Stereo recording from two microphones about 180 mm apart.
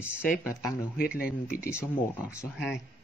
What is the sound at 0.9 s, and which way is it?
Speech, 55° left (ahead or behind).